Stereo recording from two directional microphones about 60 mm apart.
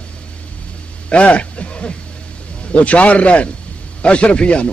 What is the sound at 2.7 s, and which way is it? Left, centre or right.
A man's voice, left.